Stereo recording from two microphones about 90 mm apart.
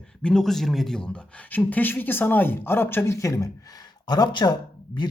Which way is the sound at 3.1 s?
35° left (ahead or behind).